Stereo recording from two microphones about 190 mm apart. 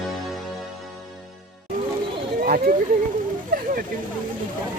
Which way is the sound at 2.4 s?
50° right (ahead or behind).